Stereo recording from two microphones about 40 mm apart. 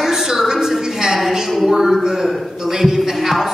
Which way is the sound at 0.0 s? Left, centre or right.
Centre.